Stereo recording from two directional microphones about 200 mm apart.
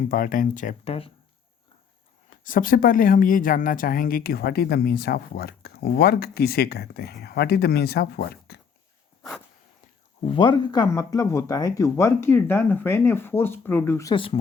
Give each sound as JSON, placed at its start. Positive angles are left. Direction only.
{"t": 0.1, "sound": "speech", "side_deg": 45}
{"t": 2.3, "sound": "a woman's voice", "side_deg": 40}
{"t": 10.2, "sound": "speech", "side_deg": 25}